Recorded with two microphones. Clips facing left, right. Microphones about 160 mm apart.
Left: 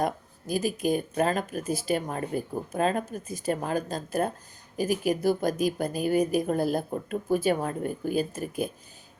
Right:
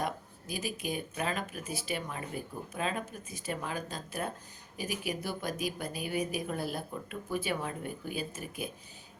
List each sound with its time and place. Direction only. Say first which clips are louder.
0.0 s speech: left 7 dB; 45° left (ahead or behind)